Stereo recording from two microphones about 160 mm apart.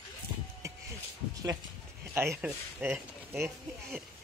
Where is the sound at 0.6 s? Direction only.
20° right (ahead or behind).